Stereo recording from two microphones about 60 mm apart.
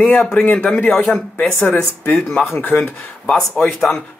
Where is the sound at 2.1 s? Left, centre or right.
Centre.